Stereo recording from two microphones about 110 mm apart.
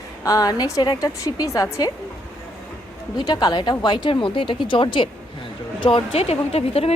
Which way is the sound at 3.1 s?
40° left (ahead or behind).